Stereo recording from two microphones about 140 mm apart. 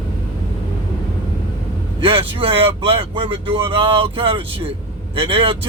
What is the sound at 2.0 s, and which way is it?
Speech, 40° right (ahead or behind).